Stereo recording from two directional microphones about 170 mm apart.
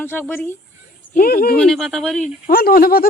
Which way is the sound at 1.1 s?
60° left (ahead or behind).